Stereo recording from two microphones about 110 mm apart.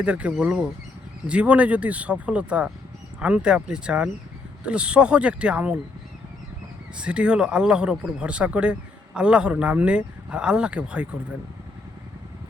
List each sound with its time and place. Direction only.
0.0 s speech: 10° right (ahead or behind)
6.9 s speech: 10° right (ahead or behind)